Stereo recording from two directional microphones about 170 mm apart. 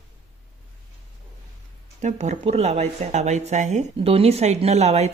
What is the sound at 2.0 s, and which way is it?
Speech, 45° right (ahead or behind).